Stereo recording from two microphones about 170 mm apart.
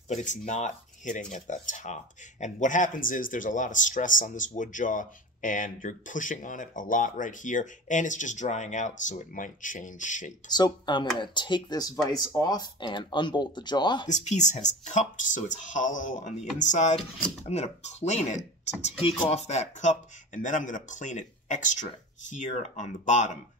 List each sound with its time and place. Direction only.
0.1 s speech: 45° left (ahead or behind)
10.5 s speech: 25° left (ahead or behind)
14.0 s speech: 45° left (ahead or behind)